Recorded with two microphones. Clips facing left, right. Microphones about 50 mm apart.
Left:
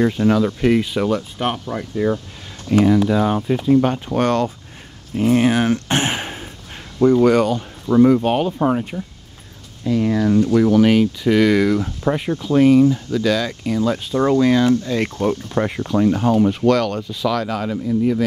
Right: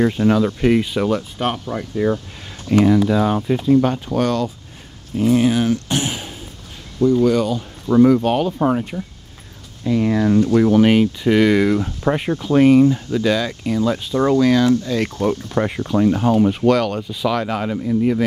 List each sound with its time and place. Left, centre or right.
0.2 s speech: centre
2.7 s speech: centre
3.1 s speech: centre
3.6 s speech: centre
4.2 s speech: left
8.1 s speech: centre
8.5 s speech: centre
9.8 s speech: right; by 11.9 s centre
12.0 s speech: right
13.1 s speech: centre
13.5 s speech: centre
15.2 s speech: centre
17.4 s speech: right